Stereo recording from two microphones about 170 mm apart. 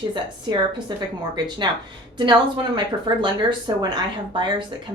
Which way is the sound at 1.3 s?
25° right (ahead or behind).